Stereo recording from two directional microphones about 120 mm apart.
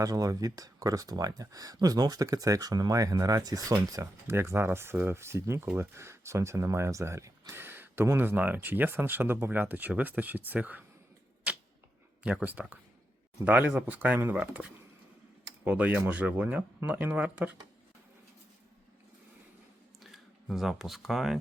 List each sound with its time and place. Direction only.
0.0 s speech: 30° right (ahead or behind); by 10.8 s 15° right (ahead or behind)
12.2 s speech: 10° right (ahead or behind)
20.0 s speech: centre (ahead or behind)